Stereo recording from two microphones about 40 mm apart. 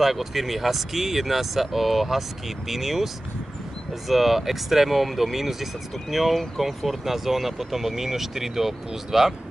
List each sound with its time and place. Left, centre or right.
0.0 s speech: centre
4.1 s speech: centre